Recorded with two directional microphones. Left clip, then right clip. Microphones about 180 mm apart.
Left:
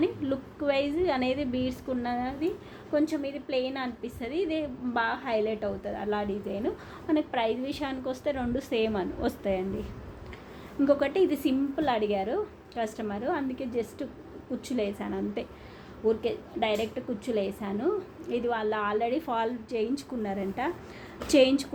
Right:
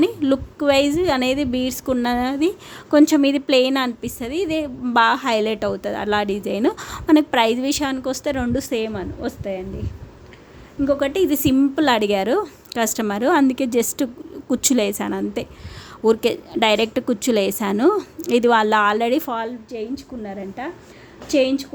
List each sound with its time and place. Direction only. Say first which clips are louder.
0.0 s a woman's voice: right 10 dB; 50° right (ahead or behind)
2.9 s a woman's voice: right 14 dB; 80° right; by 4.1 s 60° right (ahead or behind)
4.2 s a woman's voice: right 7 dB; 40° right (ahead or behind)
4.9 s a woman's voice: right 12 dB; 65° right (ahead or behind); by 8.9 s 35° right (ahead or behind)
8.9 s a woman's voice: right 3 dB; 15° right (ahead or behind)
11.0 s a woman's voice: right 7 dB; 45° right (ahead or behind)
16.0 s a woman's voice: right 10 dB; 70° right (ahead or behind); by 19.3 s 55° right (ahead or behind)
19.7 s a woman's voice: right 2 dB; 20° right (ahead or behind)